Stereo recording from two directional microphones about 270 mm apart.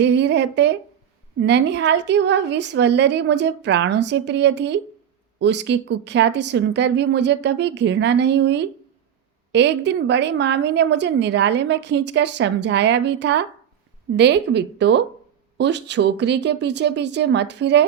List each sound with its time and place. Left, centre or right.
0.0 s a woman's voice: right